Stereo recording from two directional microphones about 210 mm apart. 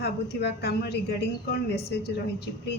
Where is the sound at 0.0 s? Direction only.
50° left (ahead or behind).